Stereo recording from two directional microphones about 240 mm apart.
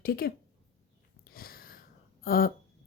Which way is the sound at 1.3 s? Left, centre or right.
Left.